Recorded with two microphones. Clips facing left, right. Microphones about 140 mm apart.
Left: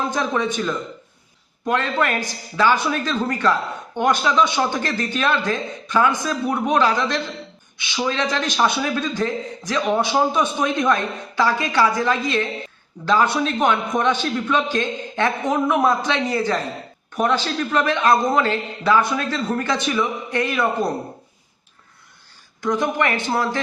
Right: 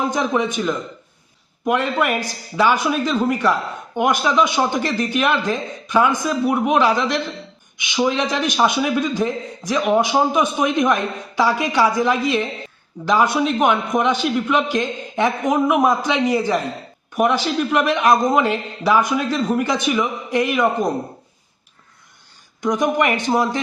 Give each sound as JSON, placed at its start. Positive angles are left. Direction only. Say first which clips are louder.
{"t": 0.1, "sound": "a man's voice", "louder": "right 2 dB", "side_deg": -15}
{"t": 22.6, "sound": "a man's voice", "louder": "right 3 dB", "side_deg": -15}